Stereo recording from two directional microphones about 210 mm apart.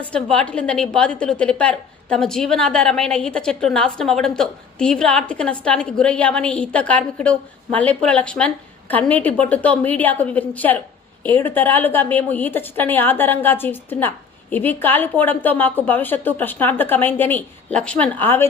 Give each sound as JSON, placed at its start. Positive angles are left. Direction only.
{"t": 0.0, "sound": "a woman's voice", "side_deg": 5}